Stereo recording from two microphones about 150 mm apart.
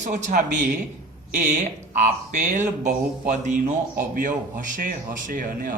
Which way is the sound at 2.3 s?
55° right (ahead or behind).